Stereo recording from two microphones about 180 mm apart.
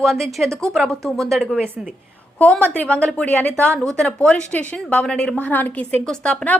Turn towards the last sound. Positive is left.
turn(degrees=5)  # may be behind; listen again after turning